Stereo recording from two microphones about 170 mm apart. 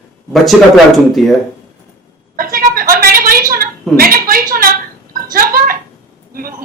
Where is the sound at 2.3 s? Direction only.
55° right (ahead or behind).